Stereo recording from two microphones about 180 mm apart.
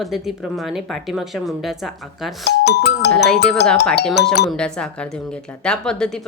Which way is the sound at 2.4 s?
70° left (ahead or behind).